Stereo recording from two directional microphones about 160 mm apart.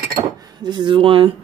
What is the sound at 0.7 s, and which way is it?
Speech, 30° right (ahead or behind).